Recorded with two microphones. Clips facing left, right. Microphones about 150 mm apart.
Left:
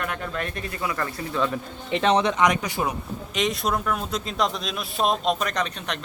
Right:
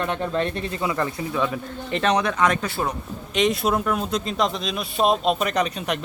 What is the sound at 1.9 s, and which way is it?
Speech, 10° left (ahead or behind).